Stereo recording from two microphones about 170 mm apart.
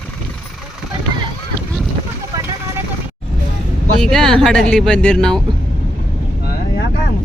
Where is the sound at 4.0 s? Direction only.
Centre (ahead or behind).